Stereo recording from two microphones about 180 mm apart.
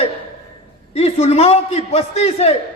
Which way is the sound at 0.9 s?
35° left (ahead or behind).